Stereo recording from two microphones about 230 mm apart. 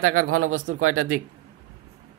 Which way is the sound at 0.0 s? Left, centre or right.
Right.